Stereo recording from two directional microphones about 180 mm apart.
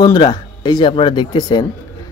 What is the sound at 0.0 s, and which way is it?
A man's voice, 20° left (ahead or behind).